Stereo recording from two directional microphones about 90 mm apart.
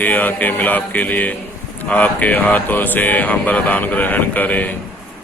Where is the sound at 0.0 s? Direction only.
20° left (ahead or behind).